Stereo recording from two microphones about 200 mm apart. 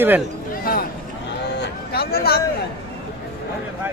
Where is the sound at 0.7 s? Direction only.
45° left (ahead or behind).